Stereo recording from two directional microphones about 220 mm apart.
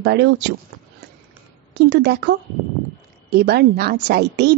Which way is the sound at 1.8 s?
50° right (ahead or behind).